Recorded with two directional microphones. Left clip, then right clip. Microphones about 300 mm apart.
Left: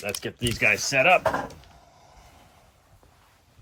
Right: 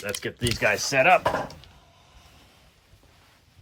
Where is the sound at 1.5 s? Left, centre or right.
Centre.